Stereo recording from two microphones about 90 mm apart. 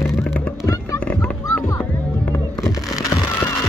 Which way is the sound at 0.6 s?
35° left (ahead or behind).